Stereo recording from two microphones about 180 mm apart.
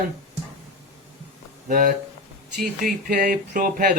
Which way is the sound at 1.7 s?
50° right (ahead or behind).